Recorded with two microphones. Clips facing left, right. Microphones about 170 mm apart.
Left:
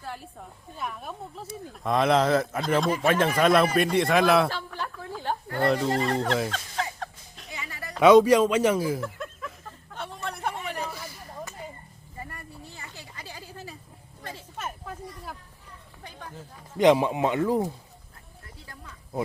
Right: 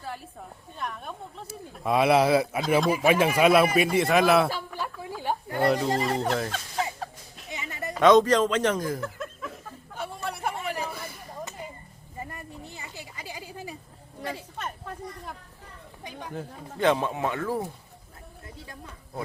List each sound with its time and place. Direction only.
0.0 s speech: centre (ahead or behind)
5.6 s speech: centre (ahead or behind)
7.5 s music: 20° right (ahead or behind)
7.9 s chuckle: 10° left (ahead or behind); by 11.0 s 10° right (ahead or behind)
12.1 s a sound: 15° right (ahead or behind)
14.6 s a sound: 5° left (ahead or behind)
16.7 s speech: 15° left (ahead or behind)